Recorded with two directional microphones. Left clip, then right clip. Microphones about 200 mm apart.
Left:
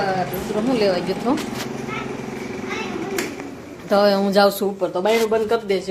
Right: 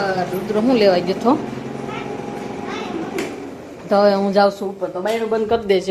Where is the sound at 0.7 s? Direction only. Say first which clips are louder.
Right 5 dB; 20° right (ahead or behind).